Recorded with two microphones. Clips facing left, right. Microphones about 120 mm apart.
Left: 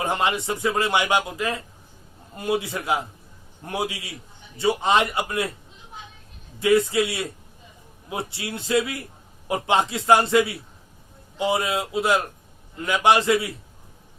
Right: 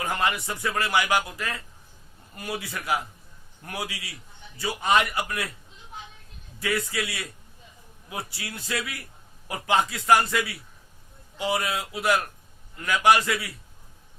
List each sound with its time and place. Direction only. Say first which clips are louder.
0.0 s speech: left 3 dB; 25° left (ahead or behind)
6.6 s speech: left 9 dB; 25° left (ahead or behind)
8.3 s speech: left 13 dB; 25° left (ahead or behind)